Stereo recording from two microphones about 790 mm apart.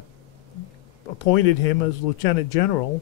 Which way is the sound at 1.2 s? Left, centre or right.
Left.